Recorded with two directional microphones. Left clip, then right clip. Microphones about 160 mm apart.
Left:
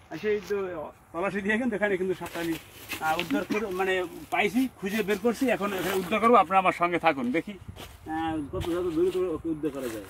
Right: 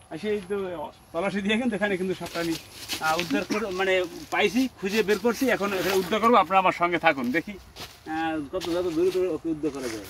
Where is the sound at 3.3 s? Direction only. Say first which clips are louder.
Right 2 dB; 30° right (ahead or behind).